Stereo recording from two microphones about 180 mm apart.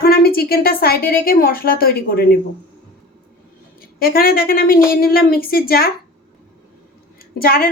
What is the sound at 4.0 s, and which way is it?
A woman's voice, 55° left (ahead or behind).